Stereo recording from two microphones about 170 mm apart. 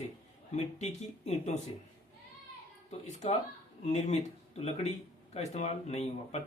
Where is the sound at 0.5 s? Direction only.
40° left (ahead or behind).